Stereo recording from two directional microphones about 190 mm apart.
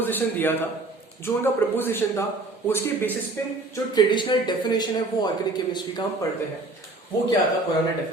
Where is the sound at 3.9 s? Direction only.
25° left (ahead or behind).